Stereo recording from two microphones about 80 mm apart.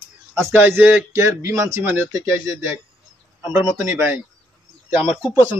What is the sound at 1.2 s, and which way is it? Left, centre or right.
Speech, right.